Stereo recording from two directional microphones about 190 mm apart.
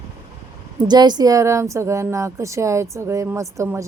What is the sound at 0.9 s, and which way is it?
A woman's voice, 20° right (ahead or behind).